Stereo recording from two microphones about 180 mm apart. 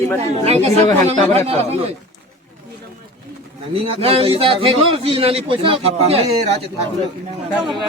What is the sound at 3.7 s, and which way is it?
A man's voice, 30° right (ahead or behind).